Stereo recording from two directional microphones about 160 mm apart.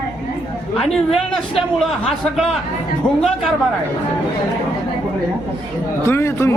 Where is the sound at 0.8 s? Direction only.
Centre (ahead or behind).